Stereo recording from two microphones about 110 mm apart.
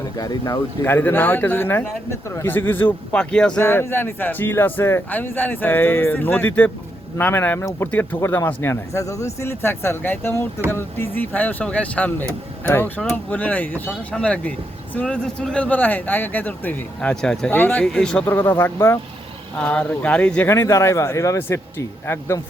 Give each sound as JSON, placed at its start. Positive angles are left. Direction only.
{"t": 0.2, "sound": "speech", "side_deg": 35}
{"t": 0.9, "sound": "speech", "side_deg": 20}
{"t": 3.6, "sound": "speech", "side_deg": 20}
{"t": 18.3, "sound": "speech", "side_deg": 20}
{"t": 19.5, "sound": "speech", "side_deg": 10}
{"t": 20.5, "sound": "speech", "side_deg": 30}